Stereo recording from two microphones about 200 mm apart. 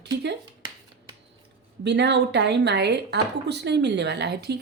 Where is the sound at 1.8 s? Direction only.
60° right (ahead or behind).